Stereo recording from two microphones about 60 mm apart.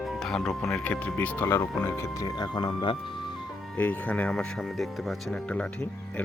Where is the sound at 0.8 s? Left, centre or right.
Left.